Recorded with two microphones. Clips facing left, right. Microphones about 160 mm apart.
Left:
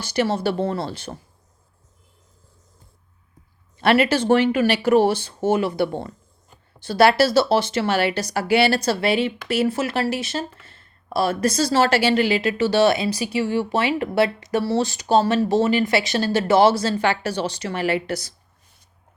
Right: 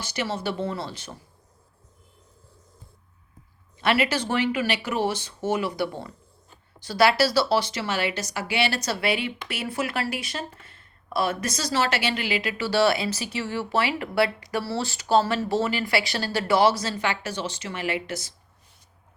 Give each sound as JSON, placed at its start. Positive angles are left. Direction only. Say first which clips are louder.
{"t": 0.3, "sound": "speech", "louder": "left 6 dB", "side_deg": 30}
{"t": 4.3, "sound": "speech", "louder": "left 7 dB", "side_deg": 50}
{"t": 4.9, "sound": "speech", "louder": "left 8 dB", "side_deg": 30}
{"t": 6.8, "sound": "speech", "louder": "left 4 dB", "side_deg": 55}
{"t": 8.1, "sound": "speech", "louder": "left 9 dB", "side_deg": 35}